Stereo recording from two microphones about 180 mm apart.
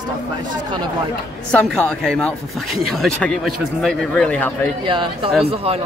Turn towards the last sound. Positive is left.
turn(degrees=-35)  # may be behind; listen again after turning